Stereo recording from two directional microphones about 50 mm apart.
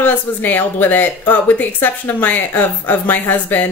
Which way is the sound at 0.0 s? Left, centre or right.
Left.